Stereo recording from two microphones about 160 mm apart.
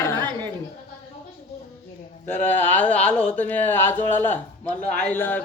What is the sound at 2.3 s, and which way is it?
Speech, 15° left (ahead or behind).